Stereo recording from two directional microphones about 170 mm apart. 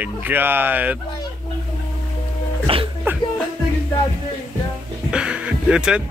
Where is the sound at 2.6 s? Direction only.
30° right (ahead or behind).